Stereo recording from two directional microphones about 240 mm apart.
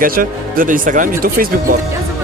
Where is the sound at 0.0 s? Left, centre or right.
Right.